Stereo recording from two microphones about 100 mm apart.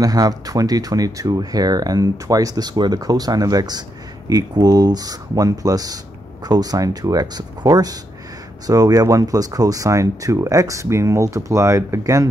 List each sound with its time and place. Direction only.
0.0 s speech: 35° right (ahead or behind)